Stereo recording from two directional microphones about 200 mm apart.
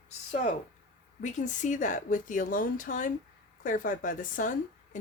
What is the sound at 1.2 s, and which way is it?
Speech, 40° left (ahead or behind).